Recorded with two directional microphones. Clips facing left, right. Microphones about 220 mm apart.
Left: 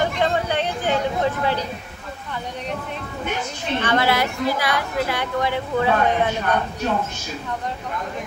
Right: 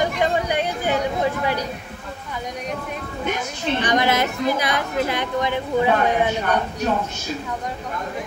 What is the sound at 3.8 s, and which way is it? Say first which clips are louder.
A woman's voice: even; 15° right (ahead or behind).